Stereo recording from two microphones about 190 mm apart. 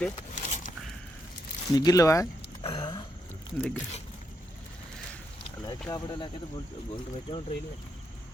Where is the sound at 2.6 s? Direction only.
25° left (ahead or behind).